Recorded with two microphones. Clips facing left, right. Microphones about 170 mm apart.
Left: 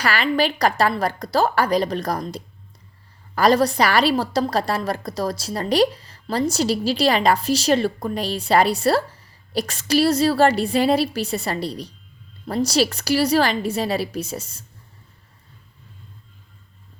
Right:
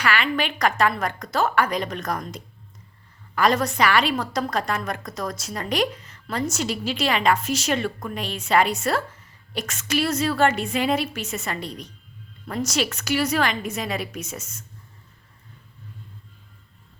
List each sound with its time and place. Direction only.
0.0 s a woman's voice: 35° left (ahead or behind)